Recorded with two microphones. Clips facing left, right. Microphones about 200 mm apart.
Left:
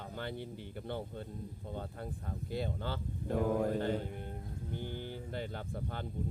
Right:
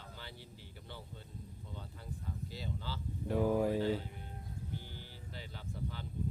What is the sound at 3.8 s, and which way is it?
Speech, 50° left (ahead or behind).